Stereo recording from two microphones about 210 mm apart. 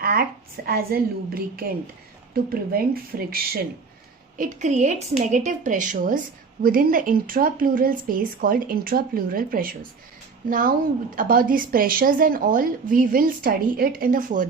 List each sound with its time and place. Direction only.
0.0 s speech: 45° right (ahead or behind)
4.4 s a woman's voice: 35° right (ahead or behind)